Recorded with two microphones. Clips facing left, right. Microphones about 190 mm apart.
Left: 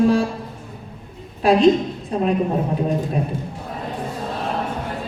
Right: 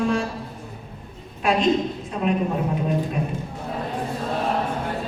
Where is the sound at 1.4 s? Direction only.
35° left (ahead or behind).